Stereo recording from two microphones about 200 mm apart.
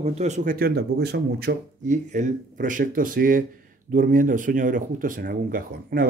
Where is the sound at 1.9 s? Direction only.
40° right (ahead or behind).